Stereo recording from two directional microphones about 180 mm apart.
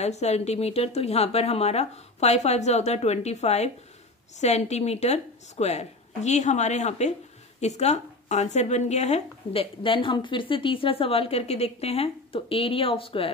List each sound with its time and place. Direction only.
0.0 s speech: 40° left (ahead or behind)